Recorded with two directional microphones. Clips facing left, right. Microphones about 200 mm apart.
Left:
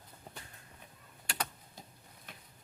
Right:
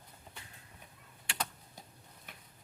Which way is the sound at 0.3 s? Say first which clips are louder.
Left 4 dB; 40° left (ahead or behind).